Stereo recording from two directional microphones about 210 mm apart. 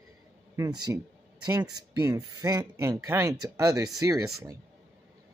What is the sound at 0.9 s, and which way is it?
Speech, 15° right (ahead or behind).